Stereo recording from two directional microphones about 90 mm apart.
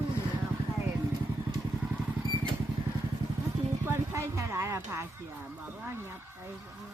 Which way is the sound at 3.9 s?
30° right (ahead or behind).